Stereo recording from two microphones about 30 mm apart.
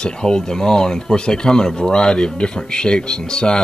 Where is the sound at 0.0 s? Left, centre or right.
Left.